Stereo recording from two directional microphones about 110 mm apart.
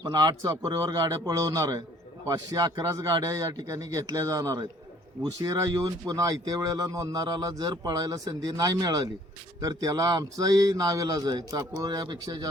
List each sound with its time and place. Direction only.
0.0 s speech: 40° right (ahead or behind)